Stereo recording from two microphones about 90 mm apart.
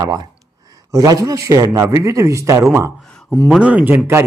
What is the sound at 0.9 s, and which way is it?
A man's voice, 40° right (ahead or behind).